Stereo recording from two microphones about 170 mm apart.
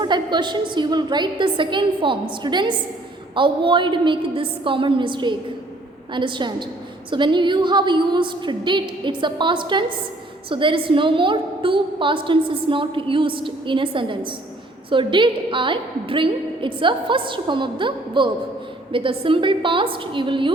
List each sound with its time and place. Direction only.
0.0 s a woman's voice: 25° right (ahead or behind)